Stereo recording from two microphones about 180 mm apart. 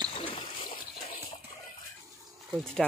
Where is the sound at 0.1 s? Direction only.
30° left (ahead or behind).